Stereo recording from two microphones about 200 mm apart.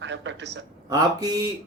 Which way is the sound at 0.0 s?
65° right (ahead or behind).